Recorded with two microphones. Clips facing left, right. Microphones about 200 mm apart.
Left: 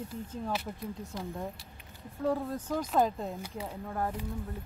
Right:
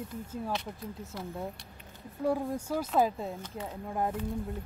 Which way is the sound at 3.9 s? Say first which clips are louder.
Right 3 dB; 20° right (ahead or behind).